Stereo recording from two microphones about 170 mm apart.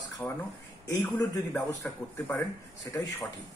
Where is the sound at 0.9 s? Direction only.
15° left (ahead or behind).